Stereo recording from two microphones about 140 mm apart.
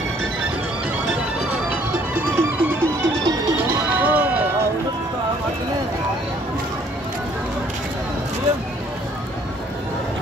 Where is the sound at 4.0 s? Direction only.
10° right (ahead or behind).